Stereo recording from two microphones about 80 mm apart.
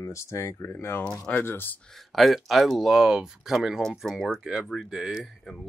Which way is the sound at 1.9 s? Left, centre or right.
Centre.